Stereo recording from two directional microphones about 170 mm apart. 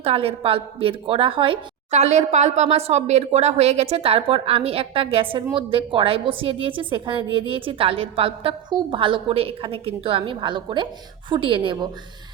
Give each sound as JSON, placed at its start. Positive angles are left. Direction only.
{"t": 0.0, "sound": "a woman's voice", "side_deg": -35}